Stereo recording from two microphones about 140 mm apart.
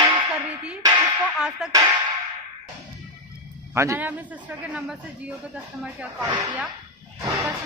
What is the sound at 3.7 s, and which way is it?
A man's voice, 20° right (ahead or behind).